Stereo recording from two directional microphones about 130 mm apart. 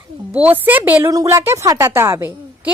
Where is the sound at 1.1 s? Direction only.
25° right (ahead or behind).